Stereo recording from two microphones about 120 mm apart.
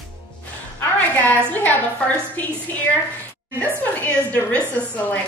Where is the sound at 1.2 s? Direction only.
15° left (ahead or behind).